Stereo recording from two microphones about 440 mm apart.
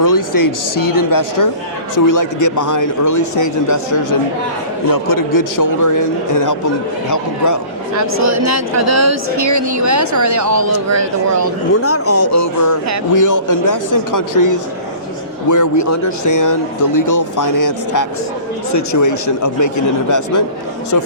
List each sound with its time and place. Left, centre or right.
0.0 s a man's voice: left
7.9 s speech: right
11.7 s a man's voice: left